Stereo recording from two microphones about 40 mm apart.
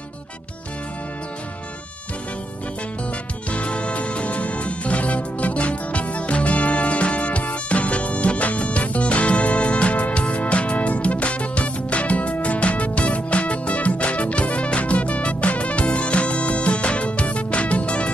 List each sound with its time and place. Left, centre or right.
3.4 s music: left